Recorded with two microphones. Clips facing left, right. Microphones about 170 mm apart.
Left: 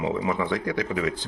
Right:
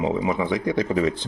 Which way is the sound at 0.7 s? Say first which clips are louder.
Right 5 dB; 30° right (ahead or behind).